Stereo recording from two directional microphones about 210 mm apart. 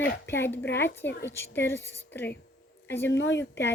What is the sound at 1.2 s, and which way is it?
A woman's voice, 10° left (ahead or behind).